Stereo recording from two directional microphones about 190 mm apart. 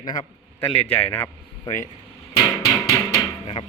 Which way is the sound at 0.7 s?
10° left (ahead or behind).